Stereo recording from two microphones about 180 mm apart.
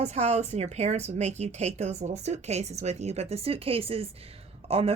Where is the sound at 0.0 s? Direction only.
35° right (ahead or behind).